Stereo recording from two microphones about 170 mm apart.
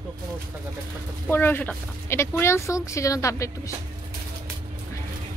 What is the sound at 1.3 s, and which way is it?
Speech, 10° left (ahead or behind).